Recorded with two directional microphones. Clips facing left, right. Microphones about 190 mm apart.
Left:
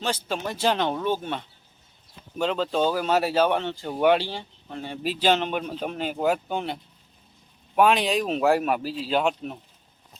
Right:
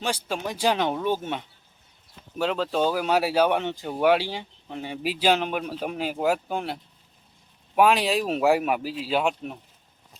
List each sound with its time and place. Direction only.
0.0 s speech: 10° right (ahead or behind)
3.9 s speech: 5° right (ahead or behind)
7.8 s speech: 5° right (ahead or behind)